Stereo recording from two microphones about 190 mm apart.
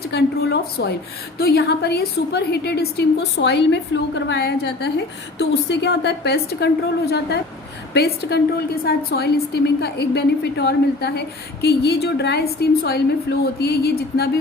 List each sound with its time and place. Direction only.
0.0 s a woman's voice: 60° left (ahead or behind)